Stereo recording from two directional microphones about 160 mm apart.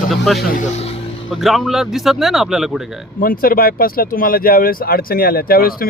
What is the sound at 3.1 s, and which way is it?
Speech, 65° left (ahead or behind).